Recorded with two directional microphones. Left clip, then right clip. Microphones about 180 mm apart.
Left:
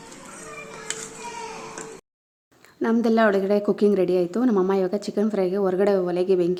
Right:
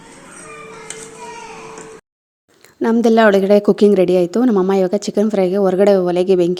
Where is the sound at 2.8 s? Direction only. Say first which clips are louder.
Right 8 dB; 40° right (ahead or behind).